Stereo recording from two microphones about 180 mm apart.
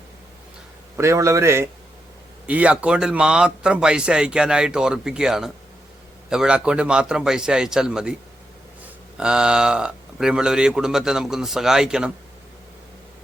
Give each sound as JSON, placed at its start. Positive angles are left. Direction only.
{"t": 0.9, "sound": "a man's voice", "side_deg": -15}
{"t": 9.1, "sound": "a man's voice", "side_deg": -5}